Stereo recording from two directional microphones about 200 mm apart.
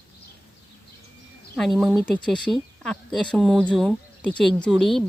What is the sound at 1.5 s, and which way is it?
Speech, centre (ahead or behind).